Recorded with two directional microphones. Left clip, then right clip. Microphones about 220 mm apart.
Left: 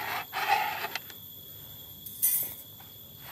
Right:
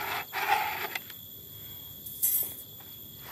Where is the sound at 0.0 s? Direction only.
Centre (ahead or behind).